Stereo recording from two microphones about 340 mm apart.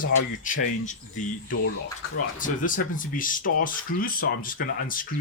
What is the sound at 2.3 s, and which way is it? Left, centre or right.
Speech, left.